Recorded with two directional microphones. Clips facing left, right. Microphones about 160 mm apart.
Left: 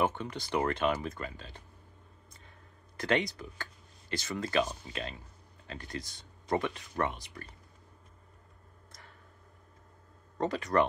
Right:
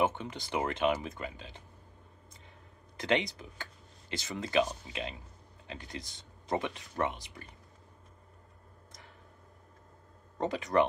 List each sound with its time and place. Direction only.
0.0 s speech: 20° right (ahead or behind)
3.0 s speech: 20° right (ahead or behind)
10.3 s speech: 20° right (ahead or behind)